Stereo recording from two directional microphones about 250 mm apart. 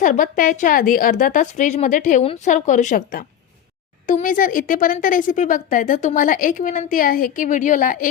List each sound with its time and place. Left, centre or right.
0.0 s speech: left